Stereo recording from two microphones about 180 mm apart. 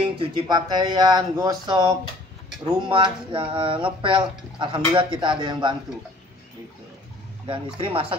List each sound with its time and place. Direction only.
0.0 s speech: 25° right (ahead or behind)
7.4 s speech: 30° right (ahead or behind)